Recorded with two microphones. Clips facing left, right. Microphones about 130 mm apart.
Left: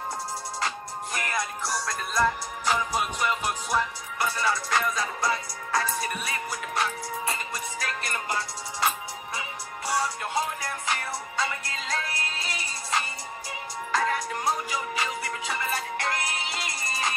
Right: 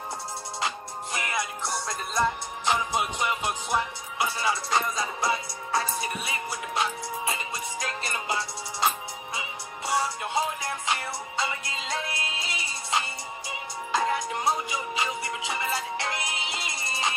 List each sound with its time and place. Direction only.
1.1 s music: 20° right (ahead or behind)
10.9 s music: 20° right (ahead or behind)